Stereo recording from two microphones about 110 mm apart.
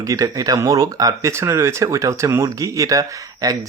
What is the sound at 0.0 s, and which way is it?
Speech, 30° right (ahead or behind).